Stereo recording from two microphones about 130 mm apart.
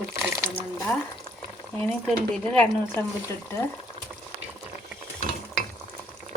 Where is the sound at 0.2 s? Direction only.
20° right (ahead or behind).